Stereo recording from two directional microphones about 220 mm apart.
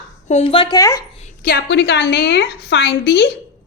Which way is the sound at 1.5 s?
50° left (ahead or behind).